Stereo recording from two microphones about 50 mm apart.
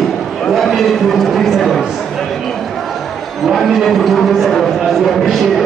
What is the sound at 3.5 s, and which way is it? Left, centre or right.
A man's voice, centre.